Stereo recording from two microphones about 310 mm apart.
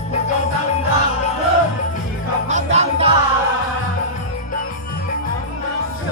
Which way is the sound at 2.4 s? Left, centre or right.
Right.